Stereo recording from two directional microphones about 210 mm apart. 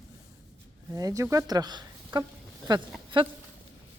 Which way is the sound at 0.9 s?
15° right (ahead or behind).